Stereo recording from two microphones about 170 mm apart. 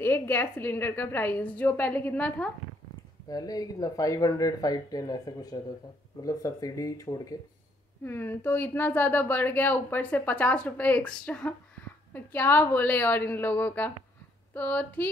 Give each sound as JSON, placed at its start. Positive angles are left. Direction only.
{"t": 0.0, "sound": "speech", "side_deg": 15}
{"t": 3.3, "sound": "speech", "side_deg": 20}